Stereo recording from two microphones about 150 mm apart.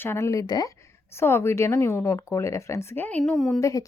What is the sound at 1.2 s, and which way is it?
Speech, 15° left (ahead or behind).